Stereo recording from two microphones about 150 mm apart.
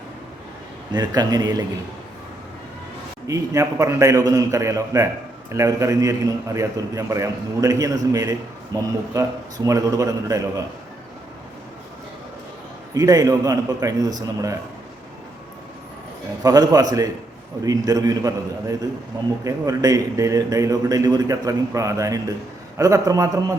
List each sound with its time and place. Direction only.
0.9 s a man's voice: 25° right (ahead or behind)
3.2 s a man's voice: 20° right (ahead or behind)
12.9 s a man's voice: 25° right (ahead or behind)
16.4 s a man's voice: 25° right (ahead or behind)